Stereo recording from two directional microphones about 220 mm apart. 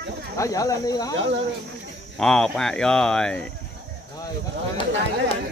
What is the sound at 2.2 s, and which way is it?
Speech, 5° left (ahead or behind).